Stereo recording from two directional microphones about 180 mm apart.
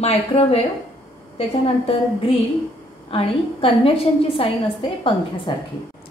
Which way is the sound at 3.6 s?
30° left (ahead or behind).